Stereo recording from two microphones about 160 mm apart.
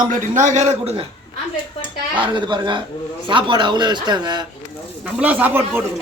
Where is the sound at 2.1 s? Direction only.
30° right (ahead or behind).